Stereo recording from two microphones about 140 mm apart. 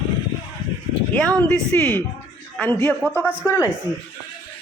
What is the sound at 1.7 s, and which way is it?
Speech, 15° left (ahead or behind).